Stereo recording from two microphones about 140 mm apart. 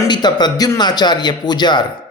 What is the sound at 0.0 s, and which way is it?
A man's voice, 30° left (ahead or behind).